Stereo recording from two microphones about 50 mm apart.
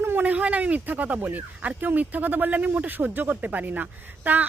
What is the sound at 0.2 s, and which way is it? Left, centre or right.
Speech, right.